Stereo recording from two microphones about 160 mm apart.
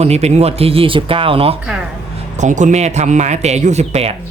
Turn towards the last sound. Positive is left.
turn(degrees=-40)  # may be behind; listen again after turning